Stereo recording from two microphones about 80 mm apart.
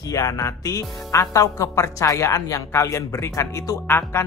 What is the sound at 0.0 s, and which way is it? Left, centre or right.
A woman's voice, left.